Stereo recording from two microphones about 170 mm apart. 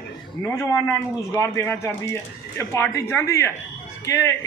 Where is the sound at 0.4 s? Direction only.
15° left (ahead or behind).